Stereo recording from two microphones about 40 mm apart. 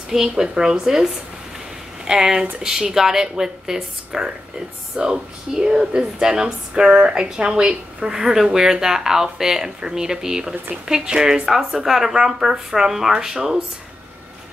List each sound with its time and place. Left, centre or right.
0.1 s speech: centre